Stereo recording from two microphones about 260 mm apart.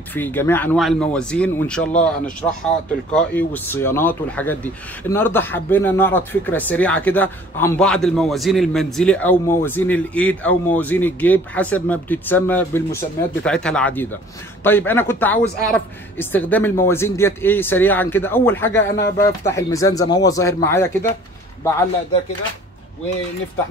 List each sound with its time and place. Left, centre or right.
0.1 s speech: centre
18.8 s speech: left
19.1 s speech: centre